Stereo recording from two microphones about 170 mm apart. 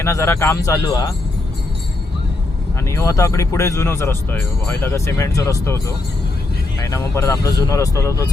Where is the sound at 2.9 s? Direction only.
15° left (ahead or behind).